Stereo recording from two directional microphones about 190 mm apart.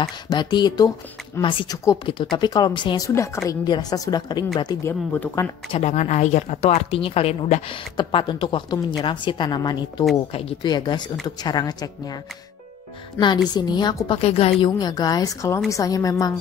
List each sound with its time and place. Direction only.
0.0 s a woman's voice: 20° left (ahead or behind)
5.7 s speech: 35° left (ahead or behind); by 12.2 s 20° left (ahead or behind)
13.2 s a woman's voice: 25° left (ahead or behind)